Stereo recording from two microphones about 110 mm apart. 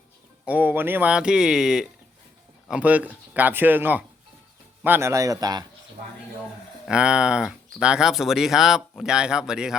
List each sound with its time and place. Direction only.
0.4 s a man's voice: 15° right (ahead or behind); by 5.6 s 35° right (ahead or behind)
6.8 s speech: 10° right (ahead or behind)